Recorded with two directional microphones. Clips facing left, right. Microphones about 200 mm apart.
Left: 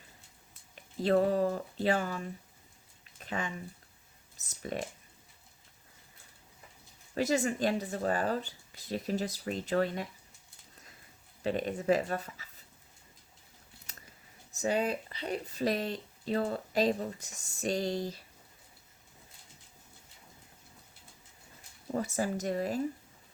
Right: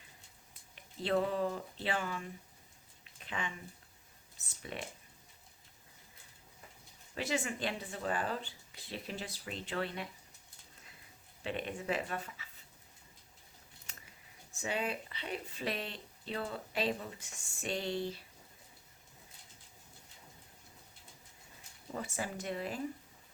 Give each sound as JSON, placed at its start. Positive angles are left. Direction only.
{"t": 0.8, "sound": "speech", "side_deg": 40}
{"t": 3.2, "sound": "a sound", "side_deg": 40}
{"t": 4.4, "sound": "speech", "side_deg": 40}
{"t": 7.2, "sound": "speech", "side_deg": 40}
{"t": 11.4, "sound": "speech", "side_deg": 40}
{"t": 13.9, "sound": "scissors", "side_deg": 40}
{"t": 14.5, "sound": "speech", "side_deg": 40}
{"t": 21.9, "sound": "speech", "side_deg": 40}